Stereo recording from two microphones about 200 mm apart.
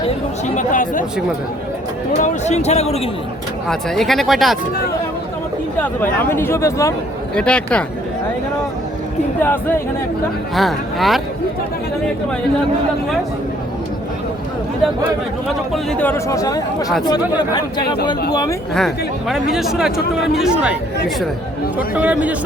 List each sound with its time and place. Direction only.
0.5 s speech: 40° left (ahead or behind)
2.1 s speech: 35° left (ahead or behind)
3.7 s speech: centre (ahead or behind)
5.8 s speech: 10° left (ahead or behind)
9.4 s speech: 10° left (ahead or behind)
15.7 s speech: 5° left (ahead or behind); by 17.8 s 20° left (ahead or behind)
19.3 s speech: centre (ahead or behind)
21.8 s speech: 5° right (ahead or behind)